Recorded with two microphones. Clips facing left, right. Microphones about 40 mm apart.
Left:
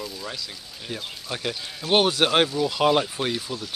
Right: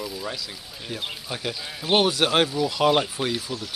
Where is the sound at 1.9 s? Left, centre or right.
Centre.